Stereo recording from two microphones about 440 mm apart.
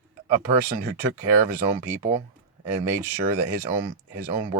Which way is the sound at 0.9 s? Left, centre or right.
Centre.